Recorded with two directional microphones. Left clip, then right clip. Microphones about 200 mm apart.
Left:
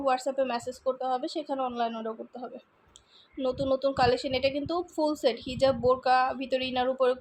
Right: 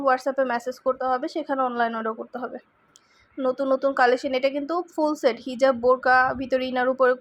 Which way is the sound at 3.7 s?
15° right (ahead or behind).